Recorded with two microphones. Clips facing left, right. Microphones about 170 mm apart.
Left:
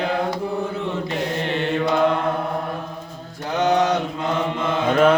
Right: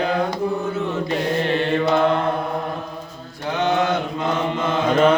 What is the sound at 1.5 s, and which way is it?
Mantra, 20° left (ahead or behind).